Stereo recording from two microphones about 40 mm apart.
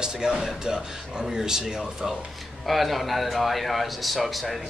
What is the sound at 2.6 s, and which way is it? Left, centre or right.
A man's voice, centre.